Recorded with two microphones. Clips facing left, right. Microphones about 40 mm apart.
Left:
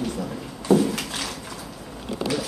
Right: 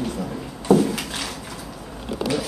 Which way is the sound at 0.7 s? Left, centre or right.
Centre.